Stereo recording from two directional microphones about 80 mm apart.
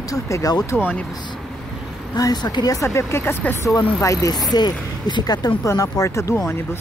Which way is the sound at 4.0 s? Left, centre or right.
Left.